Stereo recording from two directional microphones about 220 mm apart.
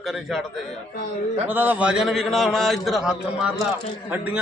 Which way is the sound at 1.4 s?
10° right (ahead or behind).